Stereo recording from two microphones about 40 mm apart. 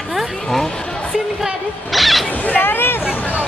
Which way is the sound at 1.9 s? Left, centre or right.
Centre.